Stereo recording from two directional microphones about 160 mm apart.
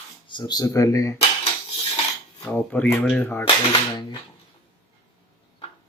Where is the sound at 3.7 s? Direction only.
25° left (ahead or behind).